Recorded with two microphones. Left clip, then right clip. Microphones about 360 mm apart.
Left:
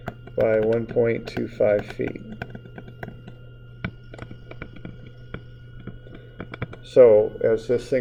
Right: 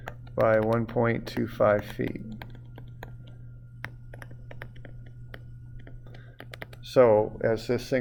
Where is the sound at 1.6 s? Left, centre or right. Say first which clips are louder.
Left 3 dB; right.